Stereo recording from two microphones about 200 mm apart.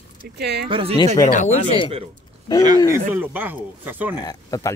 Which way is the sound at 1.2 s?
35° left (ahead or behind).